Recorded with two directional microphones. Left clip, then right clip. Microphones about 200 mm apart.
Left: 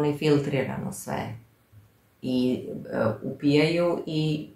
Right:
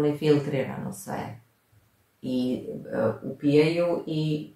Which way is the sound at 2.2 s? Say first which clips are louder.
Left 2 dB; 30° left (ahead or behind).